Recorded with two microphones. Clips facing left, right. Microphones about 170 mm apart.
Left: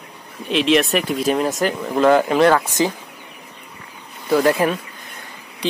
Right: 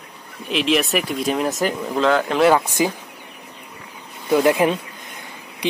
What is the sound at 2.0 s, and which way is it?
Speech, 10° left (ahead or behind).